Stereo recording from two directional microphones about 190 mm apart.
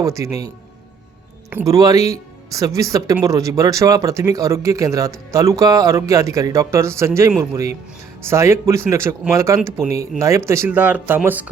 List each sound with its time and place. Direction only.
0.0 s speech: 15° right (ahead or behind)